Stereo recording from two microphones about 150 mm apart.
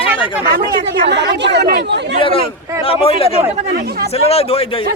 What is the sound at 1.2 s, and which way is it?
Speech, 90° right.